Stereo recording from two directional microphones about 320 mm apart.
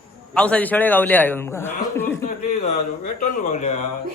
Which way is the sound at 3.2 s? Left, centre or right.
Left.